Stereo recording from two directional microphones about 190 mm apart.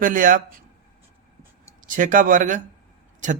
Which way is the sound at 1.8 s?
45° right (ahead or behind).